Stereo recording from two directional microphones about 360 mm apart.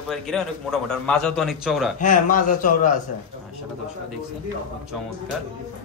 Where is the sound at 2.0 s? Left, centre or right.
Left.